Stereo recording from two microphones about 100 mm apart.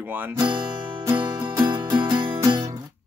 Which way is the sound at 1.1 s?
50° right (ahead or behind).